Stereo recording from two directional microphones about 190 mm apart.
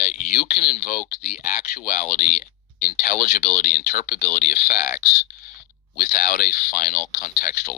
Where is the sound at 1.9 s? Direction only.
45° left (ahead or behind).